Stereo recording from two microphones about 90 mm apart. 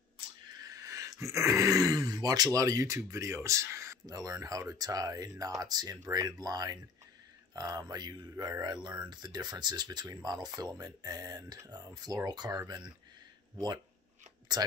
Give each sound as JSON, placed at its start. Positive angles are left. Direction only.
{"t": 0.7, "sound": "speech", "side_deg": -35}
{"t": 14.5, "sound": "speech", "side_deg": -50}